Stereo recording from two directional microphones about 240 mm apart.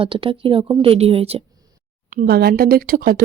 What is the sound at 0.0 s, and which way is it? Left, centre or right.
A woman's voice, right.